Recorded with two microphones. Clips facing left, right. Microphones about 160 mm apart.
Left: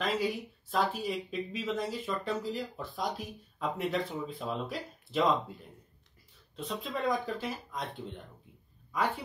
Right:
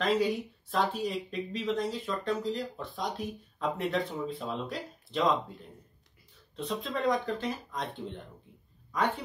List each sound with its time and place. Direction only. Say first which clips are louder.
0.0 s speech: right 4 dB; centre (ahead or behind)
6.5 s speech: right 3 dB; centre (ahead or behind)